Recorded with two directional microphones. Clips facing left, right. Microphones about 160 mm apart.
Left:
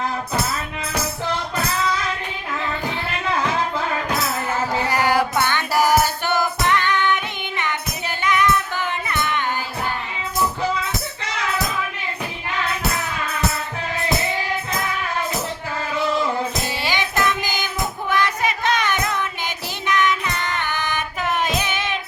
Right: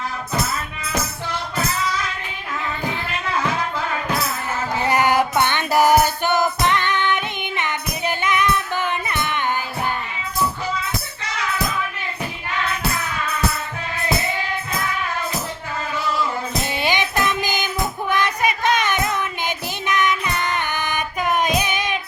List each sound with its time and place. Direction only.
4.9 s music: 20° right (ahead or behind)
16.6 s child singing: 20° right (ahead or behind)